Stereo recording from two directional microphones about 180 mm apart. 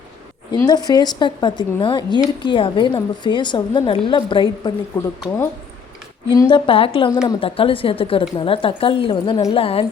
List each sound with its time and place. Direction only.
0.5 s speech: 20° left (ahead or behind)
6.3 s speech: 25° left (ahead or behind)